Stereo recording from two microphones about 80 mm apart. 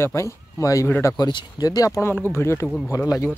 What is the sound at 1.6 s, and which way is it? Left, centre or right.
Speech, left.